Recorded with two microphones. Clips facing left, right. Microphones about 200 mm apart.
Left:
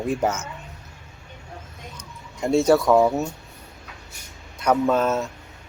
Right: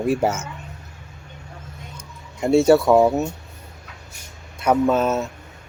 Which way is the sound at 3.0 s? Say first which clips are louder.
Right 2 dB; 15° right (ahead or behind).